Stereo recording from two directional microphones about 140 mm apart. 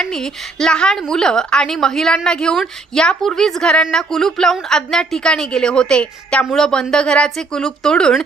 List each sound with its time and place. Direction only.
0.0 s a woman's voice: 5° left (ahead or behind)